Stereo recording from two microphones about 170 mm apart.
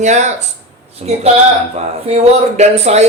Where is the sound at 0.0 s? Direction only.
45° right (ahead or behind).